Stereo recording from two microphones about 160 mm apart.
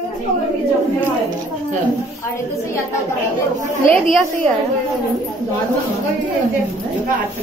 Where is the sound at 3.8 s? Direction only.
5° left (ahead or behind).